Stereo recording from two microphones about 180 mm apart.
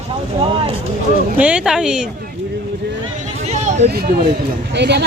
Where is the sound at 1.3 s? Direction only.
5° right (ahead or behind).